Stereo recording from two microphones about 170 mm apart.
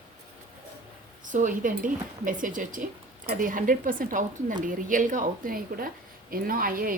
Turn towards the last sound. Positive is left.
turn(degrees=-55)  # may be behind; listen again after turning